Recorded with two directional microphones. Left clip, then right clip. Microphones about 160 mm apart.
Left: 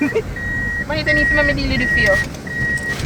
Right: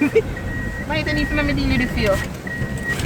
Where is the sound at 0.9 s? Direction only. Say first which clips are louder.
Left 6 dB; centre (ahead or behind).